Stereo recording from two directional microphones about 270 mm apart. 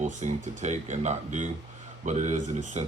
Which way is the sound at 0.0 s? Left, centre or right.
Right.